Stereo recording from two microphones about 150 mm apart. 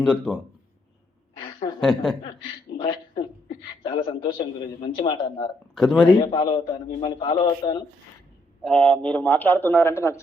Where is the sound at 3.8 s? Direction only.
30° left (ahead or behind).